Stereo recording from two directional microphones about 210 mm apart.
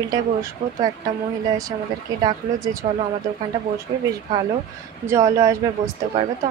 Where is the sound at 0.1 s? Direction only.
20° right (ahead or behind).